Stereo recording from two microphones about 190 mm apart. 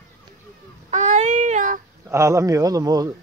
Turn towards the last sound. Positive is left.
turn(degrees=-20)  # may be behind; listen again after turning